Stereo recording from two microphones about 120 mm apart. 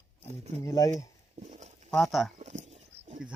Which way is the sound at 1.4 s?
75° right (ahead or behind).